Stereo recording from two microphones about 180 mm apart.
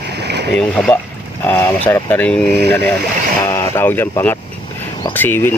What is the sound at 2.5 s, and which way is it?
Speech, 65° right (ahead or behind).